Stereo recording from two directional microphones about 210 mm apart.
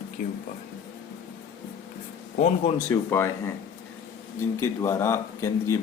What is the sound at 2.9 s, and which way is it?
Speech, 10° left (ahead or behind).